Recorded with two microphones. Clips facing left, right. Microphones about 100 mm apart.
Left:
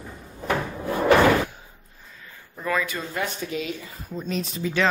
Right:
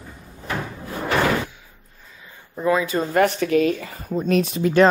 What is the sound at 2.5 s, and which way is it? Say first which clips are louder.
Speech: right 6 dB; 20° right (ahead or behind).